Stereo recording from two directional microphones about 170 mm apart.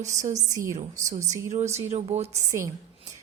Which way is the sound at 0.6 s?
20° right (ahead or behind).